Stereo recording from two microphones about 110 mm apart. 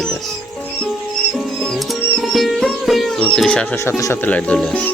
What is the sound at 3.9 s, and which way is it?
Speech, 30° left (ahead or behind).